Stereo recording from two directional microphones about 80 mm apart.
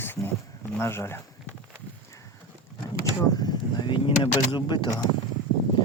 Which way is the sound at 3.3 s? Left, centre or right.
Left.